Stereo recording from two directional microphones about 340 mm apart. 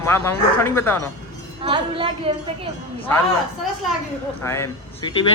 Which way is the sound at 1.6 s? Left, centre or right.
Centre.